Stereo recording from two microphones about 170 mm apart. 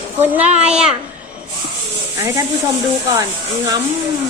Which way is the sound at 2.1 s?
15° right (ahead or behind).